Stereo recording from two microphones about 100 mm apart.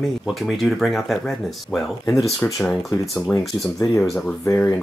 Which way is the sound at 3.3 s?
30° left (ahead or behind).